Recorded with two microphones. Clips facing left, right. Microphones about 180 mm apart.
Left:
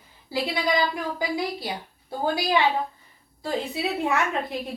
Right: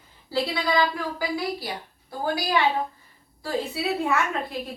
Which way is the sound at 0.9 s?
20° left (ahead or behind).